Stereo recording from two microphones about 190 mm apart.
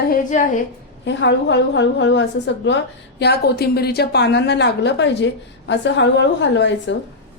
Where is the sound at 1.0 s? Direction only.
70° left (ahead or behind).